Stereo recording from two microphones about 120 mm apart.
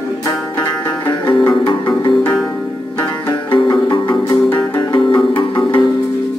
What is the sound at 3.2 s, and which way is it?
Music, 40° left (ahead or behind).